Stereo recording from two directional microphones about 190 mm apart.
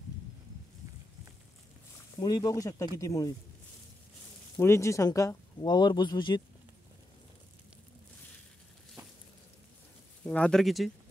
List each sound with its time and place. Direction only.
2.1 s speech: 20° left (ahead or behind)
4.6 s speech: 15° left (ahead or behind)
10.2 s speech: 5° left (ahead or behind)